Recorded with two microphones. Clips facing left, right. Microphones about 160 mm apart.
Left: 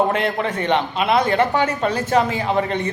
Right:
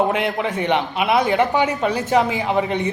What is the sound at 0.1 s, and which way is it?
A man's voice, 15° right (ahead or behind).